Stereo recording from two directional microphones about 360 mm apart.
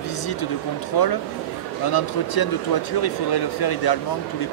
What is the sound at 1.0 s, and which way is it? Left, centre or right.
A man's voice, left.